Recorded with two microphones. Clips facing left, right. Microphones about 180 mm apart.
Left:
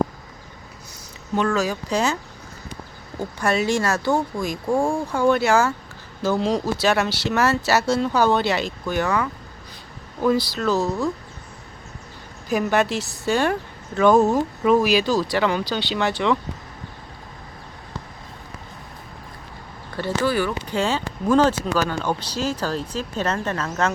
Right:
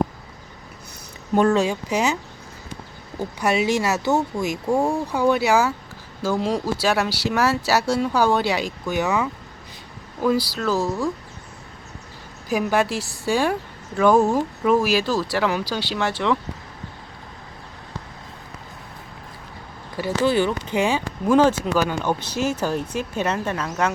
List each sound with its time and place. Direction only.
1.5 s speech: 25° right (ahead or behind)
3.2 s speech: 10° right (ahead or behind)
12.5 s speech: 5° right (ahead or behind)
20.0 s speech: 15° right (ahead or behind)